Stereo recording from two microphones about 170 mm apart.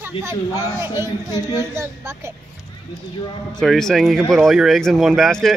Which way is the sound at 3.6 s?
5° left (ahead or behind).